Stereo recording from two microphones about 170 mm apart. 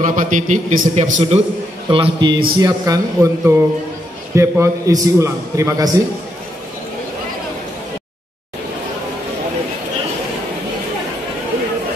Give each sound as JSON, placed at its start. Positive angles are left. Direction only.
{"t": 0.0, "sound": "a man's voice", "side_deg": -50}
{"t": 1.9, "sound": "a man's voice", "side_deg": -30}